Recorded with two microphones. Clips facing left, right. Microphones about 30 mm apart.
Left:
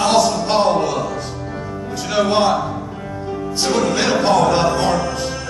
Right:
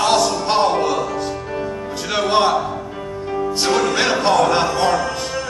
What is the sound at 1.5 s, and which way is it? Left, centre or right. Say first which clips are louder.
Music: right 2 dB; right.